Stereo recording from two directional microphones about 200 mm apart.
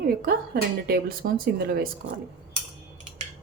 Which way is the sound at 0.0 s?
50° right (ahead or behind).